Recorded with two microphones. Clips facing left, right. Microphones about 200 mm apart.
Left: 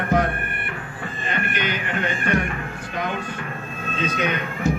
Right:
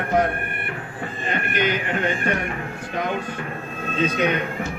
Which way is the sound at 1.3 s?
45° right (ahead or behind).